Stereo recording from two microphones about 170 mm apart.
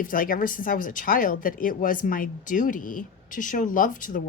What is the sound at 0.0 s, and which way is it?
A woman's voice, 55° left (ahead or behind).